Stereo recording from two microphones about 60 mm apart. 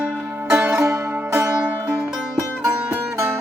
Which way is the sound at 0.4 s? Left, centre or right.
Right.